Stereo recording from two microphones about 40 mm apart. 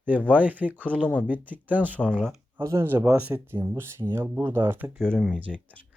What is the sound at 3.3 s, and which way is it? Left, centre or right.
Speech, right.